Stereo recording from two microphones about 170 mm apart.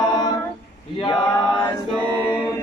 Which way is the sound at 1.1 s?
5° left (ahead or behind).